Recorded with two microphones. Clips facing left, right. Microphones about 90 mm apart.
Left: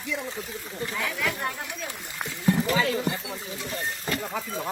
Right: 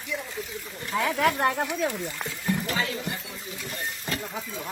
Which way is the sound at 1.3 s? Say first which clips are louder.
Right 7 dB; 65° right (ahead or behind).